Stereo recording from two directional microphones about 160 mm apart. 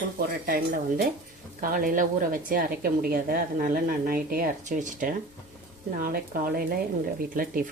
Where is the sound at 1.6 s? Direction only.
60° right (ahead or behind).